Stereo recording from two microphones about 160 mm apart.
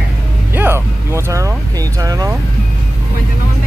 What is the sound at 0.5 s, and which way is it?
Vehicle, 15° right (ahead or behind).